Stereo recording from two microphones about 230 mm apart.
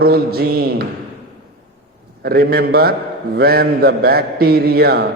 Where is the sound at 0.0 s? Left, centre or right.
Right.